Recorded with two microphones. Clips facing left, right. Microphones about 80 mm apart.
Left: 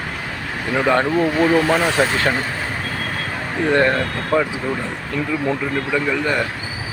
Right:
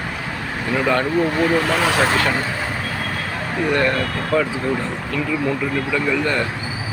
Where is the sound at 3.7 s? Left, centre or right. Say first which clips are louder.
Left 3 dB; left.